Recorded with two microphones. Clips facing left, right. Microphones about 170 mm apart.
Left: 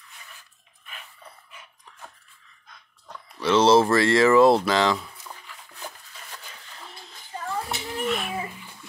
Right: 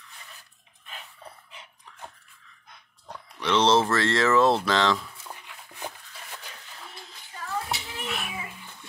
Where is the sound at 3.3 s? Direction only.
10° left (ahead or behind).